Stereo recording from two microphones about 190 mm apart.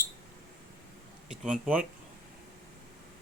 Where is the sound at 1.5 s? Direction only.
5° right (ahead or behind).